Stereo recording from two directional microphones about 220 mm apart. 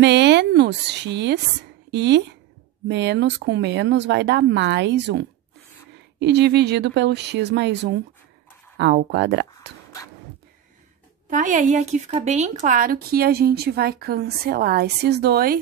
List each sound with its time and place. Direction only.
0.0 s speech: 50° right (ahead or behind)
11.2 s speech: 35° right (ahead or behind)